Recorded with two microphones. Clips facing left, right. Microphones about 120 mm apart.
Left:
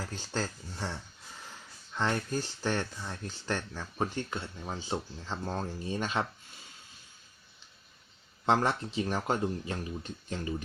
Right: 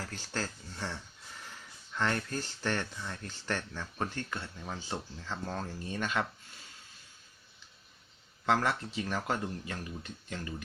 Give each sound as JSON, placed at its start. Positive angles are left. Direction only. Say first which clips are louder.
{"t": 0.0, "sound": "speech", "louder": "left 3 dB", "side_deg": 15}
{"t": 8.4, "sound": "speech", "louder": "left 2 dB", "side_deg": 25}